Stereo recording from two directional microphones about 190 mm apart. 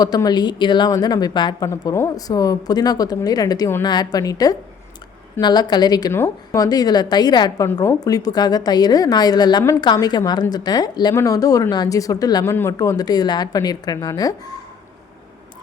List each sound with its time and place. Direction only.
0.0 s a woman's voice: 20° left (ahead or behind)